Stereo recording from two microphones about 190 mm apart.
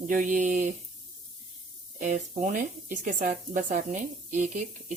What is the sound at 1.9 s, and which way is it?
Speech, 40° right (ahead or behind).